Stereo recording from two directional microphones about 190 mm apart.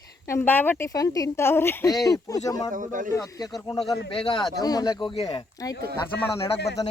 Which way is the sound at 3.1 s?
15° left (ahead or behind).